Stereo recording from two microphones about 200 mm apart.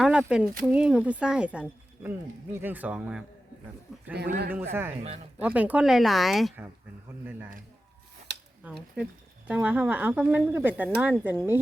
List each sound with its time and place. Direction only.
0.0 s speech: 5° right (ahead or behind)
4.1 s speech: 55° right (ahead or behind)
4.5 s speech: 10° right (ahead or behind)
8.6 s speech: 5° right (ahead or behind)